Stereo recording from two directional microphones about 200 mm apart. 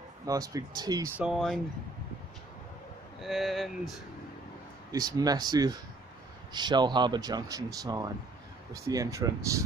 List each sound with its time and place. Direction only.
0.2 s speech: 15° right (ahead or behind)
1.1 s speech: centre (ahead or behind)
3.2 s speech: centre (ahead or behind)
4.9 s speech: 20° right (ahead or behind)